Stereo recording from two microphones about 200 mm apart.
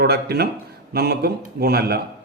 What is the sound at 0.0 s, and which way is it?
Speech, 50° right (ahead or behind).